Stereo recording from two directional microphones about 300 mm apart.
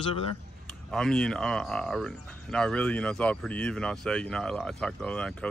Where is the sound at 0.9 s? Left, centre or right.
Centre.